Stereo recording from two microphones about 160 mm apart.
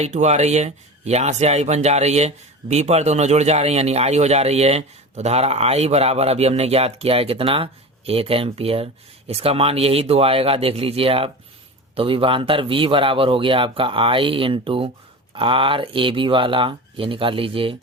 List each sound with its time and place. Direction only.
0.0 s speech: 45° right (ahead or behind)